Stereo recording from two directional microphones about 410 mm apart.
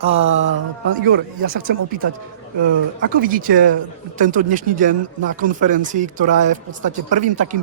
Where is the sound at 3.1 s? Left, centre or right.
Centre.